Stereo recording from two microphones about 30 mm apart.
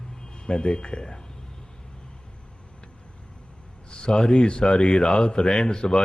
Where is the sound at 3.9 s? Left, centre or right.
Left.